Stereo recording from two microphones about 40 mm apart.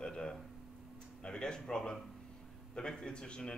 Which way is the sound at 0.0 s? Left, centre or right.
Centre.